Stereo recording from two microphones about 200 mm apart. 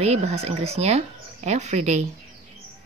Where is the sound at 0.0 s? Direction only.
30° right (ahead or behind).